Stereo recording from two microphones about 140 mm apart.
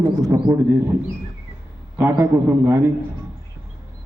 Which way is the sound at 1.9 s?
15° right (ahead or behind).